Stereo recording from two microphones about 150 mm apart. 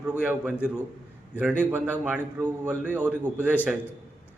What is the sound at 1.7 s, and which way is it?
A man's voice, 10° right (ahead or behind).